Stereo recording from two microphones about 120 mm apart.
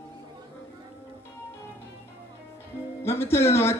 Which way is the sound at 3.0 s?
20° left (ahead or behind).